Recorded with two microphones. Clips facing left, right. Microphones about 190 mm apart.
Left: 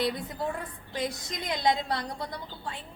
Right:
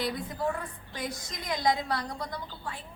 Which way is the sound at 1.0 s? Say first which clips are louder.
Left 1 dB; 25° left (ahead or behind).